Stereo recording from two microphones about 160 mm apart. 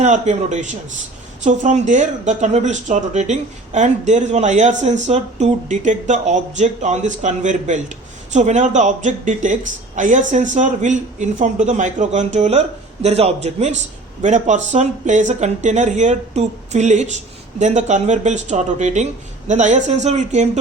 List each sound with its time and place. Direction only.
0.0 s speech: 45° right (ahead or behind)